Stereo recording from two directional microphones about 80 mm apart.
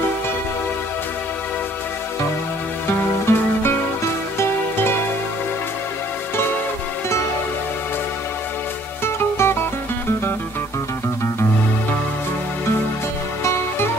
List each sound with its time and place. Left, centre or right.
3.3 s music: left
9.0 s music: left
13.4 s music: left